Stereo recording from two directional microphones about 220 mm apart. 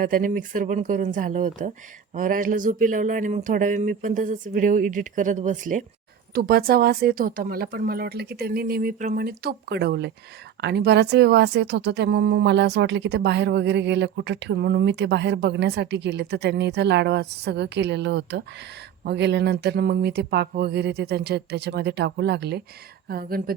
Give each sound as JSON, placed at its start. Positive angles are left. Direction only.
{"t": 0.0, "sound": "speech", "side_deg": -40}